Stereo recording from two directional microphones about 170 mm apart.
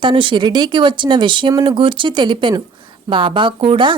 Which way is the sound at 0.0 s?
30° right (ahead or behind).